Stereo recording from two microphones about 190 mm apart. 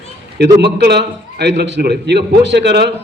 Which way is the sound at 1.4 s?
65° right (ahead or behind).